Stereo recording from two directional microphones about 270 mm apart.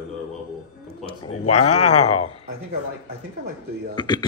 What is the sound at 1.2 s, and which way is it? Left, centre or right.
Speech, left.